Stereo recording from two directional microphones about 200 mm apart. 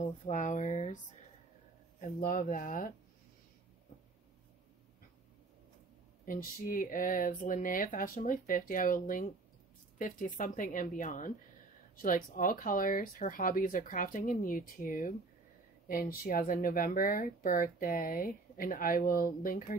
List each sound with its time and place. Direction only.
0.3 s speech: 35° left (ahead or behind)
2.0 s speech: 45° left (ahead or behind)
6.2 s speech: 45° left (ahead or behind)